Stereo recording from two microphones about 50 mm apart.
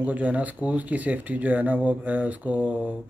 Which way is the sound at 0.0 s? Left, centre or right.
Right.